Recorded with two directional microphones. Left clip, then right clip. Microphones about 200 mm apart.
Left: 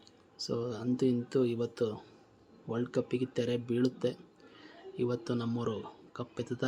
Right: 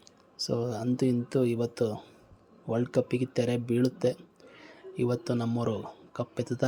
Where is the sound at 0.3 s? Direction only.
25° right (ahead or behind).